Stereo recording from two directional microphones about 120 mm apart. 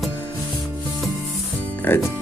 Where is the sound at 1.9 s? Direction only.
15° left (ahead or behind).